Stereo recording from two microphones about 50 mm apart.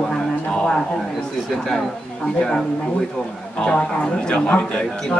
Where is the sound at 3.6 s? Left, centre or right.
Centre.